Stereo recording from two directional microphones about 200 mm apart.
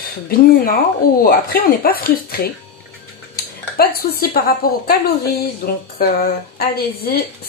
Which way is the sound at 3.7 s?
50° left (ahead or behind).